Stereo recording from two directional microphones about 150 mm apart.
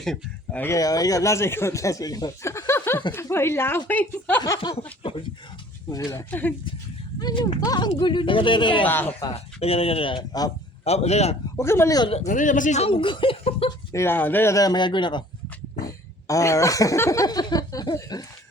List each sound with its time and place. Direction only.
0.0 s speech: 5° left (ahead or behind)
0.6 s speech: 20° left (ahead or behind)
4.4 s speech: 20° left (ahead or behind)
4.8 s speech: 35° left (ahead or behind)
5.9 s speech: 20° left (ahead or behind)
7.2 s speech: 30° left (ahead or behind)
8.9 s speech: 15° left (ahead or behind)
9.3 s speech: 40° left (ahead or behind)
10.8 s a man's voice: 45° left (ahead or behind)
11.5 s speech: 15° left (ahead or behind)
12.0 s a man's voice: 45° left (ahead or behind)
12.3 s speech: 60° left (ahead or behind); by 13.7 s 40° left (ahead or behind)
13.9 s speech: 15° left (ahead or behind); by 15.2 s 30° left (ahead or behind)
16.2 s speech: 20° left (ahead or behind)